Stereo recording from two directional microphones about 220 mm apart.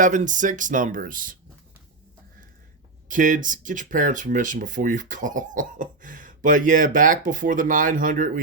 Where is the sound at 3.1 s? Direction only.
35° right (ahead or behind).